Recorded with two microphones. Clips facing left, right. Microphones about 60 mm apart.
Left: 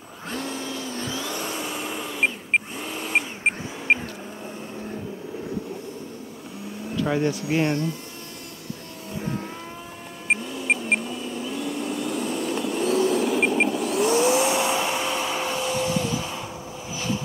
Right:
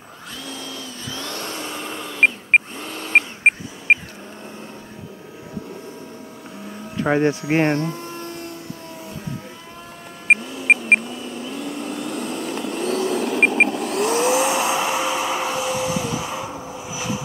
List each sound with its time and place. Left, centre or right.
0.5 s vehicle: left
1.1 s vehicle: centre
2.1 s a sound: right
3.1 s vehicle: right
3.9 s vehicle: right
7.0 s speech: right
10.4 s music: centre
11.0 s vehicle: centre
13.7 s vacuum cleaner: centre